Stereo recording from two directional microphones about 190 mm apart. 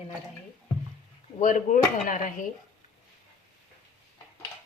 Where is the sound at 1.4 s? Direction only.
40° left (ahead or behind).